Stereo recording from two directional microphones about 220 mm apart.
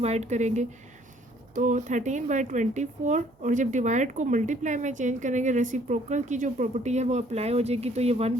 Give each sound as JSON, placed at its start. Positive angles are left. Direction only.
{"t": 0.0, "sound": "speech", "side_deg": -30}